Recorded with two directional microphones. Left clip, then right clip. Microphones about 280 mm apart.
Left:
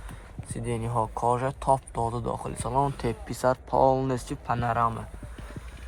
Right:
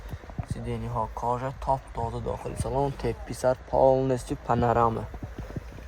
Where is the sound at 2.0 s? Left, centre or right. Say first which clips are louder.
Left 2 dB; left.